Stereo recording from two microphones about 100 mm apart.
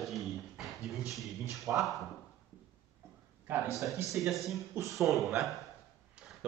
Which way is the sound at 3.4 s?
20° right (ahead or behind).